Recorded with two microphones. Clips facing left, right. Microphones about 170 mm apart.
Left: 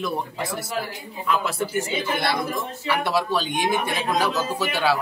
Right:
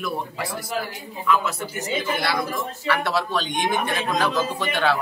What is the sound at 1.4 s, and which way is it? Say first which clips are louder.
Speech: left 4 dB; 30° left (ahead or behind).